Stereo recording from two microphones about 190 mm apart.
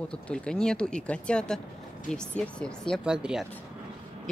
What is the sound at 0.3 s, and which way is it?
Speech, 5° left (ahead or behind).